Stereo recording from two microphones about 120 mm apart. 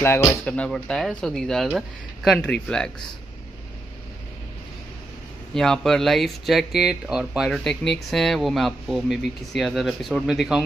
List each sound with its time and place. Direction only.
0.0 s speech: 20° left (ahead or behind)
0.5 s speech: 10° left (ahead or behind)
5.5 s speech: 5° left (ahead or behind)